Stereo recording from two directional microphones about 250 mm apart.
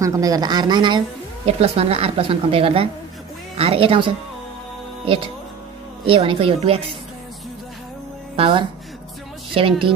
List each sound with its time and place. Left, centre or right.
0.0 s a woman's voice: centre
6.0 s a woman's voice: right
8.4 s a woman's voice: right